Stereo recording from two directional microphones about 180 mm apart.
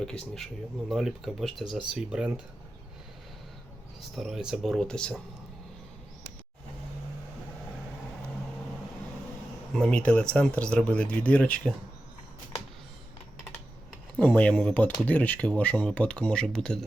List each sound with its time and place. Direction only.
0.9 s speech: centre (ahead or behind)
4.1 s speech: centre (ahead or behind)
9.7 s speech: 5° left (ahead or behind)
14.2 s speech: 10° left (ahead or behind)